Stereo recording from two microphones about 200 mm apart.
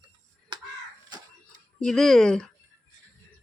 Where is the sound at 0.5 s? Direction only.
25° right (ahead or behind).